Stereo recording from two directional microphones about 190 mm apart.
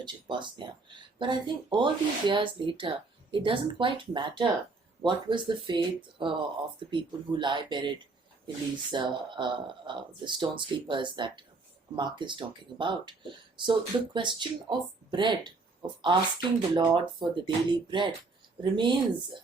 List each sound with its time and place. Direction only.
0.0 s speech: 25° right (ahead or behind)